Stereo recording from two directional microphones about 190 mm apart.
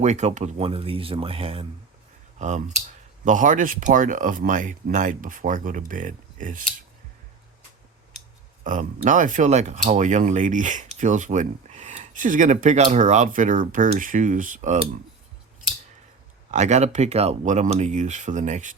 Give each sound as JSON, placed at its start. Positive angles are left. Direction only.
{"t": 0.0, "sound": "speech", "side_deg": -35}
{"t": 2.4, "sound": "speech", "side_deg": -40}
{"t": 8.6, "sound": "speech", "side_deg": -40}
{"t": 16.5, "sound": "speech", "side_deg": -35}